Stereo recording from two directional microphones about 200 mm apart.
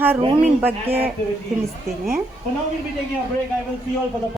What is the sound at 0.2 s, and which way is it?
Speech, 30° right (ahead or behind).